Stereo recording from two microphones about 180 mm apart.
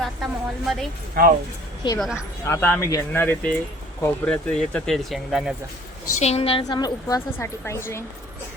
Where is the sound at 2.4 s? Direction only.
15° left (ahead or behind).